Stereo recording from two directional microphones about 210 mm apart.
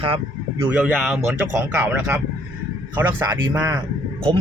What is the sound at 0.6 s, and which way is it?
Speech, 5° right (ahead or behind).